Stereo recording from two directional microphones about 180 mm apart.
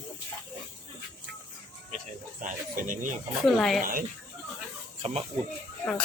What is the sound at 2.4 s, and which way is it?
Speech, 45° right (ahead or behind).